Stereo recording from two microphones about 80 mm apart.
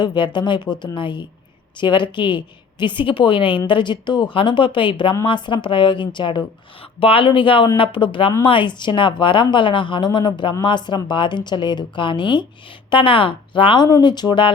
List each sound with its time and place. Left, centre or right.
0.0 s a woman's voice: left
12.9 s a woman's voice: left